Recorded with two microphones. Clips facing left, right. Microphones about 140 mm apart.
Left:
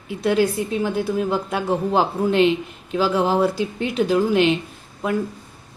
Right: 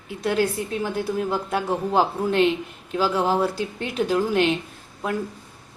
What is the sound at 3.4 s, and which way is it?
Speech, 5° left (ahead or behind).